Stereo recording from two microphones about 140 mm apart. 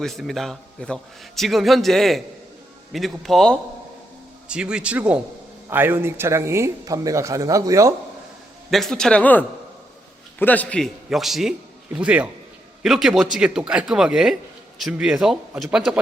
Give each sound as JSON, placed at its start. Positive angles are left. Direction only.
{"t": 0.0, "sound": "a man's voice", "side_deg": 0}
{"t": 4.4, "sound": "a man's voice", "side_deg": -5}
{"t": 8.7, "sound": "a man's voice", "side_deg": 0}
{"t": 11.1, "sound": "a man's voice", "side_deg": 0}